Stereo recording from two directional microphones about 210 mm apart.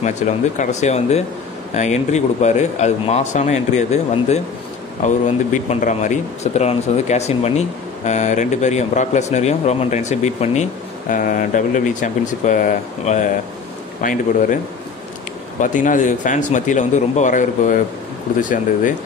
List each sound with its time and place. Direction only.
0.2 s speech: 35° left (ahead or behind)
15.6 s speech: 40° left (ahead or behind)